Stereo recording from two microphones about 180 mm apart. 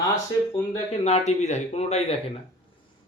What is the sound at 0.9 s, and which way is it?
A man's voice, 35° left (ahead or behind).